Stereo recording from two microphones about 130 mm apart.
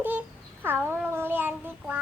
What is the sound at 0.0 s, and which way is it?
Child singing, 15° right (ahead or behind).